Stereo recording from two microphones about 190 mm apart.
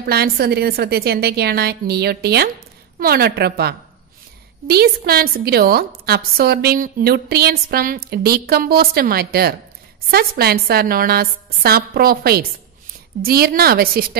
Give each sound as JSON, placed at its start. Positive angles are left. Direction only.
{"t": 0.0, "sound": "a woman's voice", "side_deg": -55}